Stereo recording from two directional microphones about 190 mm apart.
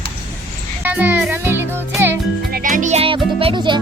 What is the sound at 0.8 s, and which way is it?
Music, 10° right (ahead or behind).